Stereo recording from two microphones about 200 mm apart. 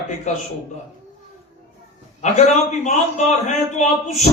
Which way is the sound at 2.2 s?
35° left (ahead or behind).